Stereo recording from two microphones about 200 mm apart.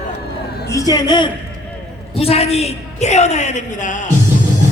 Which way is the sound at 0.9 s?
20° left (ahead or behind).